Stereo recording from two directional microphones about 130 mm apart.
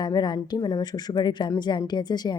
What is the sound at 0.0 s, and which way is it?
Speech, 30° left (ahead or behind).